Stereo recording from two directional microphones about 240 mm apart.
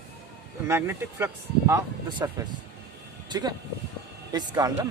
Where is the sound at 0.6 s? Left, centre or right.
Centre.